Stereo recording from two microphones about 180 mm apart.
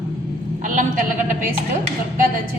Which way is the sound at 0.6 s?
45° right (ahead or behind).